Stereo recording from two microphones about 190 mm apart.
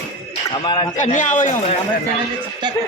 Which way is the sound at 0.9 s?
40° left (ahead or behind).